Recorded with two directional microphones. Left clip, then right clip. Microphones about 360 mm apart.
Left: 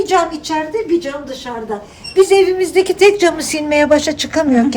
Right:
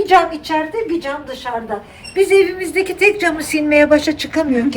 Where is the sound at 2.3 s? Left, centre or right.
Centre.